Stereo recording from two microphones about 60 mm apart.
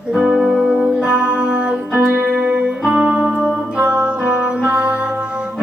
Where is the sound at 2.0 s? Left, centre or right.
Right.